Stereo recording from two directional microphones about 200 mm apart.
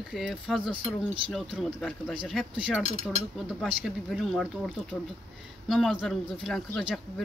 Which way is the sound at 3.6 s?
Centre (ahead or behind).